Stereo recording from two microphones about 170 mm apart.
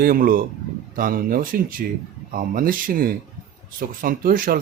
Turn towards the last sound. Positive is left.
turn(degrees=-55)  # may be behind; listen again after turning